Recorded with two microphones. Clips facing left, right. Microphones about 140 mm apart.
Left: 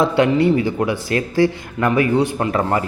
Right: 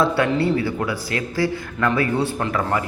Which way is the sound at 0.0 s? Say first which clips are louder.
Left 4 dB; 20° left (ahead or behind).